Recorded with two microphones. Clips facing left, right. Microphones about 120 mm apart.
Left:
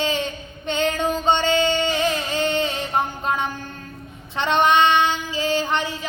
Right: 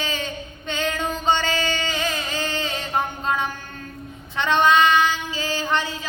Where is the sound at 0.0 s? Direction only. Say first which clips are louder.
Left 5 dB; 25° left (ahead or behind).